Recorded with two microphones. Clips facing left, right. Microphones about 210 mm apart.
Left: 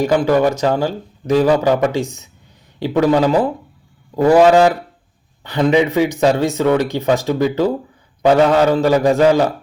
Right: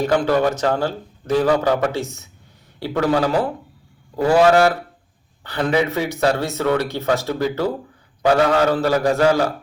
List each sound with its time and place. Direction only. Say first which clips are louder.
0.0 s speech: left 3 dB; 10° left (ahead or behind)